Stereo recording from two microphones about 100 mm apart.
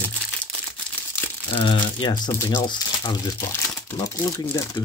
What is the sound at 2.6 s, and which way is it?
Speech, 45° left (ahead or behind).